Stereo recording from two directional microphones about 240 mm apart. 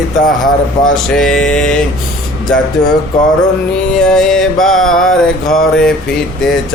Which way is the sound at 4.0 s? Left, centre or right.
Centre.